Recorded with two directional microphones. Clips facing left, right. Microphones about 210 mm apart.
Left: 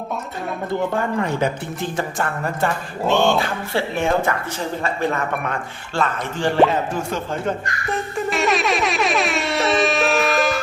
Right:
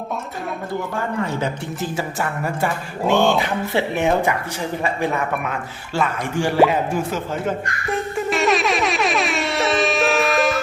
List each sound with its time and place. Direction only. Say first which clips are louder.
1.8 s speech: left 1 dB; 5° right (ahead or behind)
8.3 s air horn: right 1 dB; centre (ahead or behind)